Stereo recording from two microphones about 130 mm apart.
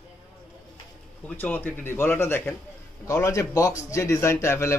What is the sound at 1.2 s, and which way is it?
Speech, 10° left (ahead or behind).